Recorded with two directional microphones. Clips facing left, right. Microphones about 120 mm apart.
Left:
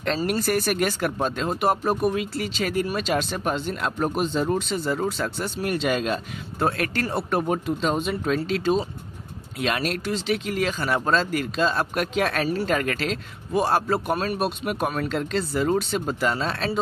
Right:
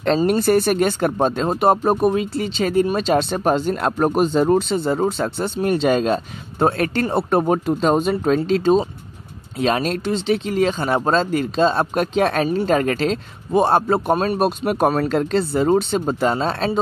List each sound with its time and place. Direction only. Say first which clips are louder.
0.0 s speech: right 7 dB; 30° right (ahead or behind); by 4.6 s 45° right (ahead or behind)
4.6 s speech: right 6 dB; 25° right (ahead or behind); by 8.4 s 40° right (ahead or behind)
8.4 s speech: right 7 dB; 30° right (ahead or behind)
14.4 s speech: right 7 dB; 40° right (ahead or behind)
15.5 s speech: right 5 dB; 30° right (ahead or behind)